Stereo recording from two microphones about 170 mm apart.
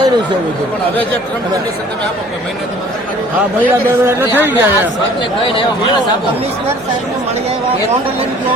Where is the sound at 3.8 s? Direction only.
10° right (ahead or behind).